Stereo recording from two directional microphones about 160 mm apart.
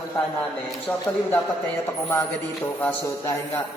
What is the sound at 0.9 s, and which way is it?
Speech, 5° left (ahead or behind).